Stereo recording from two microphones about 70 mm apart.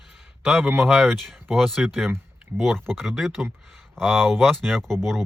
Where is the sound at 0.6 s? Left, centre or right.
Right.